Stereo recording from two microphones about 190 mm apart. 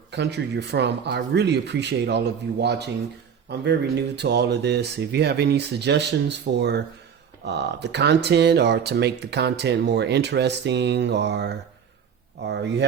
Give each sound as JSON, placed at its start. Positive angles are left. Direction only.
{"t": 0.1, "sound": "speech", "side_deg": -60}